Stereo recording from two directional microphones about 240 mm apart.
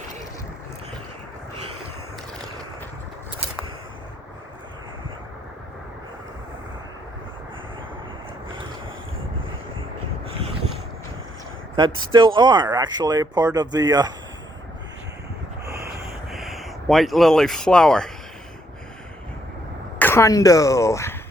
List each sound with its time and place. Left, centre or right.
11.9 s speech: centre
15.6 s a sound: right
16.3 s speech: centre
20.0 s speech: centre